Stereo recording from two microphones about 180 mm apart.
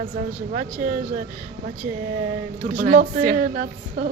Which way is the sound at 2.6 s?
45° right (ahead or behind).